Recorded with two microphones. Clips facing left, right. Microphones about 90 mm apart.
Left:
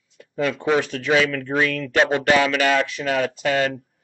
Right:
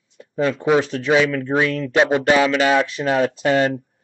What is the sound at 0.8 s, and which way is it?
Speech, 25° right (ahead or behind).